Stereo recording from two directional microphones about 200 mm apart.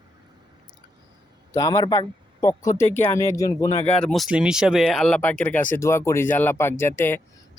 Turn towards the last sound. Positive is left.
turn(degrees=10)  # may be behind; listen again after turning